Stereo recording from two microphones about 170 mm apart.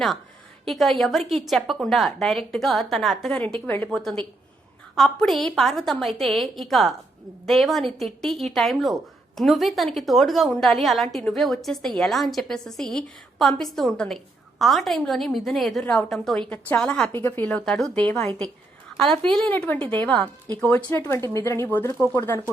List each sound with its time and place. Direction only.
0.7 s a woman's voice: centre (ahead or behind)